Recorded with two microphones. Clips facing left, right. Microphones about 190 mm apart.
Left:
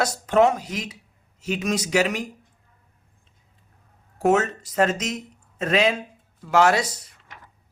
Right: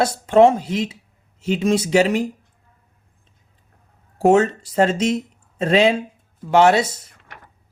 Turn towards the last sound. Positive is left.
turn(degrees=-65)  # may be behind; listen again after turning